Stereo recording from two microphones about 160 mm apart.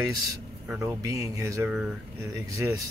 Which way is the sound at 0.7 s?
20° right (ahead or behind).